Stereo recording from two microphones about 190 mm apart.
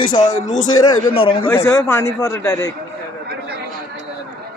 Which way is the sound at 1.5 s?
15° left (ahead or behind).